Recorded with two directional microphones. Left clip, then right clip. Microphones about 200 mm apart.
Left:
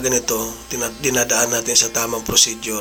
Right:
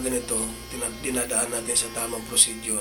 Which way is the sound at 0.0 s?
35° left (ahead or behind).